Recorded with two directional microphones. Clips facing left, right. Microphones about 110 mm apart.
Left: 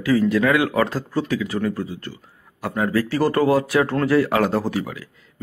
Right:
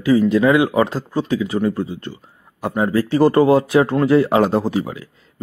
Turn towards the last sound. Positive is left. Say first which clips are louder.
# right 4 dB
turn(degrees=-25)  # may be behind; listen again after turning